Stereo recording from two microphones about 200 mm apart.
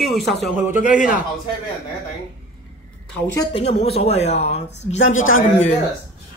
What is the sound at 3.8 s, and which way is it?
Speech, 30° left (ahead or behind).